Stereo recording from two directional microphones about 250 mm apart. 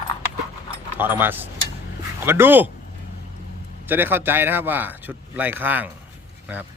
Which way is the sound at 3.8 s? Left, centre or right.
Centre.